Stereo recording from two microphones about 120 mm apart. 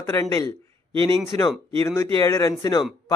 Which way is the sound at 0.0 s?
25° left (ahead or behind).